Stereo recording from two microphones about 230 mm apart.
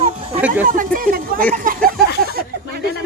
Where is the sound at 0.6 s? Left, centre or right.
Right.